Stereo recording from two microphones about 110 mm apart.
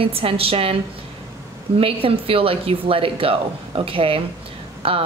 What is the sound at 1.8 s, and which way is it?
A woman's voice, 55° right (ahead or behind).